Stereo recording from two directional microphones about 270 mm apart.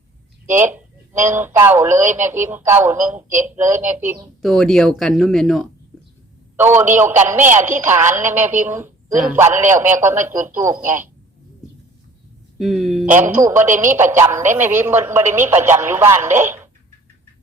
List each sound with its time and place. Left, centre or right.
0.4 s a man's voice: centre
12.5 s a man's voice: centre